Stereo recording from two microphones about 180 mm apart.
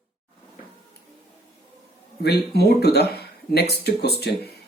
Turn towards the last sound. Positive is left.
turn(degrees=65)  # may be behind; listen again after turning